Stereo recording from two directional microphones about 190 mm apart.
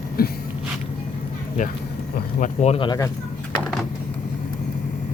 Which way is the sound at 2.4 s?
40° left (ahead or behind).